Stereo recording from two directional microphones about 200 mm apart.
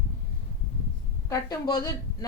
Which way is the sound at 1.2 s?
15° left (ahead or behind).